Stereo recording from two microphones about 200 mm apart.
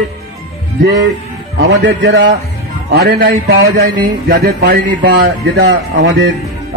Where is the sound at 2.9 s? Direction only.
50° right (ahead or behind).